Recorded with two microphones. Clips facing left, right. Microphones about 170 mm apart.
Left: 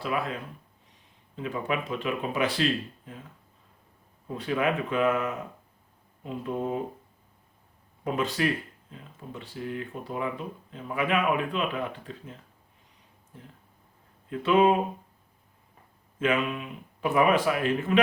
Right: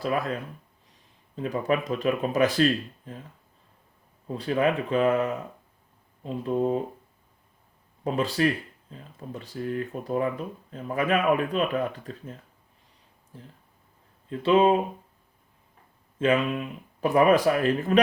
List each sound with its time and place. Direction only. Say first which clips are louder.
0.0 s speech: right 3 dB; 40° right (ahead or behind)
1.4 s speech: right 4 dB; 40° right (ahead or behind)
4.4 s speech: right 3 dB; 35° right (ahead or behind)
8.0 s speech: right 3 dB; 35° right (ahead or behind)
13.3 s speech: right 2 dB; 30° right (ahead or behind)
16.1 s speech: right 3 dB; 35° right (ahead or behind)